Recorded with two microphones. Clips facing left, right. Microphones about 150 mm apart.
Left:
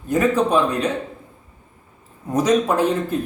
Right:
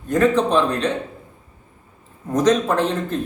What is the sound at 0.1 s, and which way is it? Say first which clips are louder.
Speech: right 1 dB; 10° left (ahead or behind).